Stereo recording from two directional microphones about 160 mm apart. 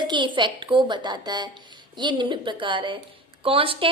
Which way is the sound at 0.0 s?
30° right (ahead or behind).